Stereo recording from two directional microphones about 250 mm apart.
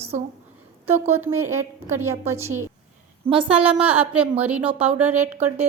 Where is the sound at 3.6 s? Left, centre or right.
Centre.